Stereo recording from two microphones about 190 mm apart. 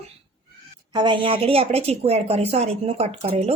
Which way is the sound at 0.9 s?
25° right (ahead or behind).